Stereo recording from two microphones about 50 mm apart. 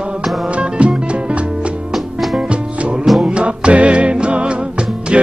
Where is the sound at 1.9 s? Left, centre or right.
Centre.